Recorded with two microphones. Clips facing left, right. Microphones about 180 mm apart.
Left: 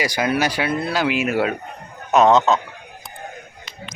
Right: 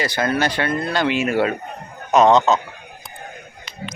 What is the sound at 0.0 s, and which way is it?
Speech, 10° left (ahead or behind).